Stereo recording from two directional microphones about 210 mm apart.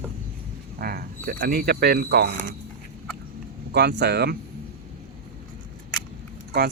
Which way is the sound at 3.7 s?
50° right (ahead or behind).